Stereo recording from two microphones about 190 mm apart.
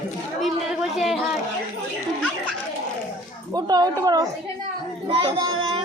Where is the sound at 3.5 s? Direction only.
20° right (ahead or behind).